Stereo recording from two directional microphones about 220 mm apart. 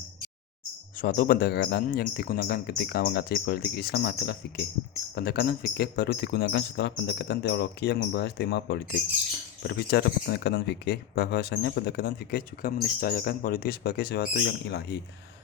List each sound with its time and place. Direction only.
0.9 s speech: 40° left (ahead or behind)